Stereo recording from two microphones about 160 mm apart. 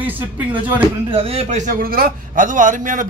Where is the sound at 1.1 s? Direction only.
35° right (ahead or behind).